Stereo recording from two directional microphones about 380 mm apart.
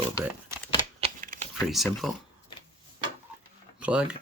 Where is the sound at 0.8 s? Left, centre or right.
Centre.